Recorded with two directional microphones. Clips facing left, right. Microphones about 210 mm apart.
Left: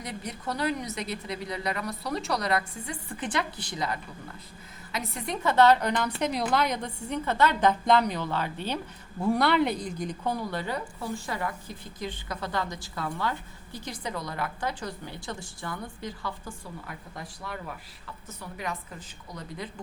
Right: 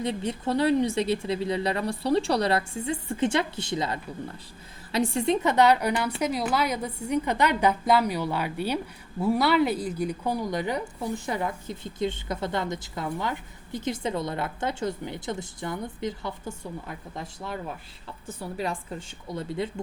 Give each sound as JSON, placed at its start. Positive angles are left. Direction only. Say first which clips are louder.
{"t": 0.0, "sound": "a woman's voice", "louder": "right 8 dB", "side_deg": -25}